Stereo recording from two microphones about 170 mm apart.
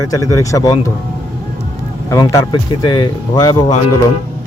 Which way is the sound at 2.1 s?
20° left (ahead or behind).